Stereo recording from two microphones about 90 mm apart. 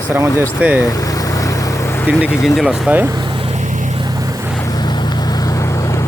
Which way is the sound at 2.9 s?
15° right (ahead or behind).